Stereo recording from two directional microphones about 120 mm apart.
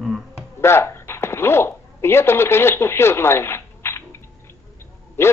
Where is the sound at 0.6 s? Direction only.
20° left (ahead or behind).